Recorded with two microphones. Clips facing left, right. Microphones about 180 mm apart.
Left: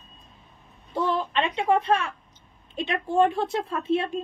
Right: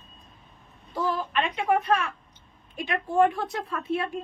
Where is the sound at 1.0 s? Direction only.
25° left (ahead or behind).